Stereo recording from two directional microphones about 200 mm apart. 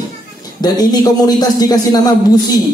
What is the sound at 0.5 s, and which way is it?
Speech, 20° left (ahead or behind).